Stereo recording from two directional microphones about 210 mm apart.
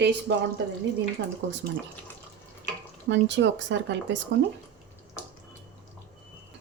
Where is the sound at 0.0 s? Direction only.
55° right (ahead or behind).